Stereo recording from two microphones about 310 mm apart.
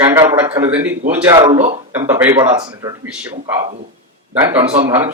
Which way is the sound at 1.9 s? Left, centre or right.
Centre.